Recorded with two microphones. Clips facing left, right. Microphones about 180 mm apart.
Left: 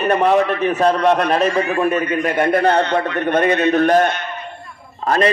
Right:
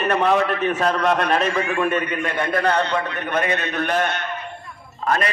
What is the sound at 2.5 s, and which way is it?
Speech, 30° left (ahead or behind).